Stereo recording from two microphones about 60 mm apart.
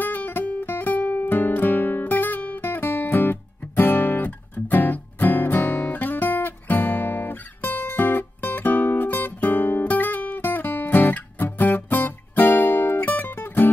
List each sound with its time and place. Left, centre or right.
0.0 s guitar: left